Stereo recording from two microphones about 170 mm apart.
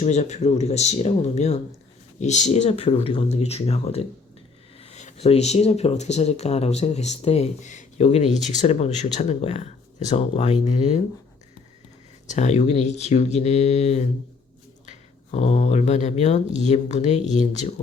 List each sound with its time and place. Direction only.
0.0 s speech: 40° left (ahead or behind)
12.3 s speech: 45° left (ahead or behind)